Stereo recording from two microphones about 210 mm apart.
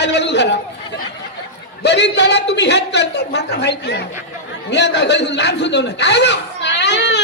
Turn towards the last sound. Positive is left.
turn(degrees=55)  # may be behind; listen again after turning